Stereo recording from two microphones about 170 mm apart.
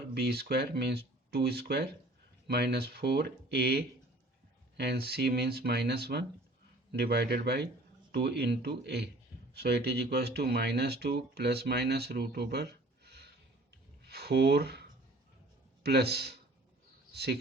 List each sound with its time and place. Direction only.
0.1 s speech: 70° right (ahead or behind)
13.1 s a sound: 75° right (ahead or behind)
14.0 s speech: 70° right (ahead or behind)